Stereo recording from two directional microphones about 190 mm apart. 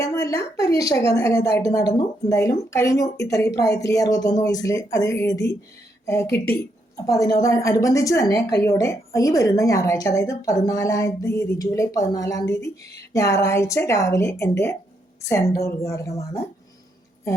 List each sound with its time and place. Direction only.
0.0 s a woman's voice: 15° left (ahead or behind)